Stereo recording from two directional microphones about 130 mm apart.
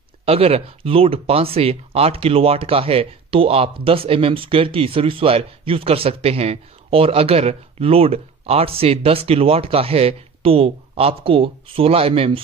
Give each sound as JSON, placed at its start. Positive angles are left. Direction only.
{"t": 0.2, "sound": "speech", "side_deg": -50}